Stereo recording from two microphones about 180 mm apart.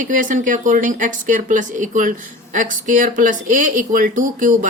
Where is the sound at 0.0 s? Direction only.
45° right (ahead or behind).